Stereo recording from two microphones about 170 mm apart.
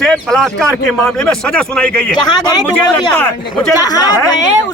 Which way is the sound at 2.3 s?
25° left (ahead or behind).